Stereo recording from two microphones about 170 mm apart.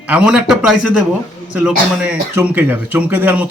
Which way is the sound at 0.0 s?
10° right (ahead or behind).